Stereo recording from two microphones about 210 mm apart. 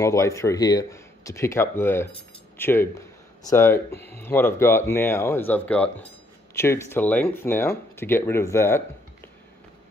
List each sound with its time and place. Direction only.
0.0 s speech: 15° left (ahead or behind)